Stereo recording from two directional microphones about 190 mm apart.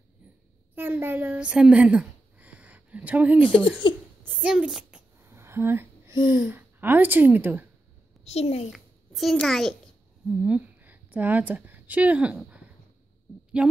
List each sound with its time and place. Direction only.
0.7 s a woman's voice: 10° right (ahead or behind)
3.8 s a woman's voice: 25° left (ahead or behind)
4.4 s a sound: 5° right (ahead or behind)
6.4 s a woman's voice: 10° right (ahead or behind)
8.2 s a child's voice: 35° left (ahead or behind)
8.6 s a child's voice: centre (ahead or behind)